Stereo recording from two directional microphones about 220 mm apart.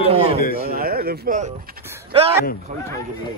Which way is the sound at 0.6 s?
40° right (ahead or behind).